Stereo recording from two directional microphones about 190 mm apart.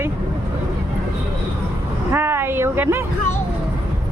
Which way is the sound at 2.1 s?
10° right (ahead or behind).